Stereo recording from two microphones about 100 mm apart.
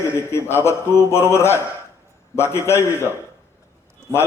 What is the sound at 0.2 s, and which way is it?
A man's voice, 25° left (ahead or behind).